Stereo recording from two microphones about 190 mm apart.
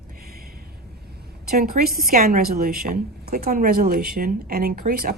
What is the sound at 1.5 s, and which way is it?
A woman's voice, 50° right (ahead or behind).